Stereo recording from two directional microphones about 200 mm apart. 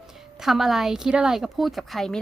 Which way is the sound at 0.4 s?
Centre (ahead or behind).